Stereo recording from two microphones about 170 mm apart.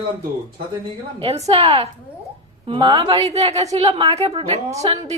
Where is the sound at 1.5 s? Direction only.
35° right (ahead or behind).